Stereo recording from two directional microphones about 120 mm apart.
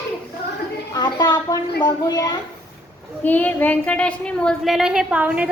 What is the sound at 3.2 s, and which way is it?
A woman's voice, 15° left (ahead or behind).